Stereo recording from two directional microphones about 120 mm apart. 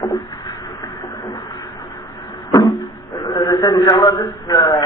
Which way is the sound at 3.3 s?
30° left (ahead or behind).